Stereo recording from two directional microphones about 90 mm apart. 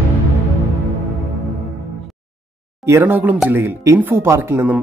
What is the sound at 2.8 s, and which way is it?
Speech, 25° right (ahead or behind).